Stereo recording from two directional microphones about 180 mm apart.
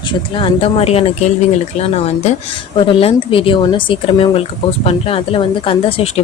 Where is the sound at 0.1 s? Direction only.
30° left (ahead or behind).